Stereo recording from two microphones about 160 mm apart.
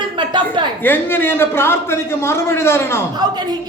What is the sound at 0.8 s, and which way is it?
A man's voice, 10° left (ahead or behind).